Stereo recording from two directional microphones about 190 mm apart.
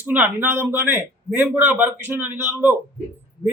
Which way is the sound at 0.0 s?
10° right (ahead or behind).